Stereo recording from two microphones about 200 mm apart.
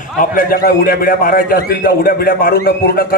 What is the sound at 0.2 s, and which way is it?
A man's voice, 45° left (ahead or behind).